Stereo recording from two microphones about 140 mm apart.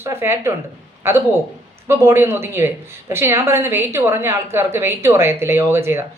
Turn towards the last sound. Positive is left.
turn(degrees=-20)  # may be behind; listen again after turning